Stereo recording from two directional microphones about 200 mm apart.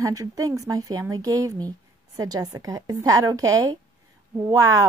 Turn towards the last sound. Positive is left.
turn(degrees=-15)  # may be behind; listen again after turning